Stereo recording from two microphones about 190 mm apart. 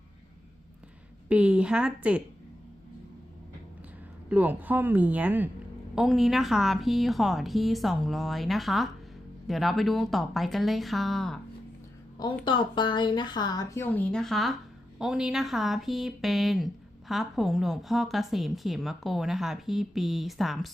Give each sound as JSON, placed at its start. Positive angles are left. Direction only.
{"t": 1.3, "sound": "a woman's voice", "side_deg": -5}
{"t": 4.3, "sound": "a woman's voice", "side_deg": -10}
{"t": 12.5, "sound": "a woman's voice", "side_deg": 25}